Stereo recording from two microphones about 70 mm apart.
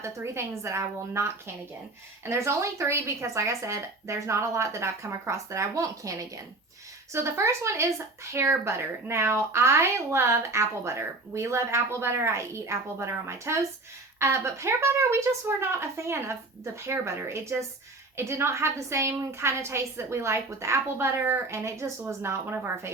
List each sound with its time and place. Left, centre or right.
0.0 s speech: right
7.1 s speech: right